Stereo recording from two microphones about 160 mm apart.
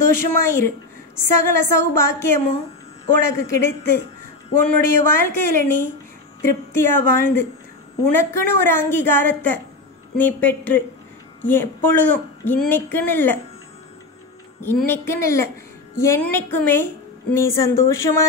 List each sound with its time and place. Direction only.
0.0 s a woman's voice: 15° left (ahead or behind)
14.9 s a woman's voice: 15° left (ahead or behind)